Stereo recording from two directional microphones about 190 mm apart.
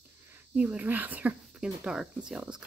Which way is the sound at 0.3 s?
10° right (ahead or behind).